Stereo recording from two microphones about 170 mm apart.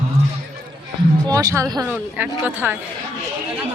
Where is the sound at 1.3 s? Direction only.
20° right (ahead or behind).